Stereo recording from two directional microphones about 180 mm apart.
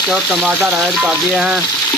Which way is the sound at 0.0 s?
5° right (ahead or behind).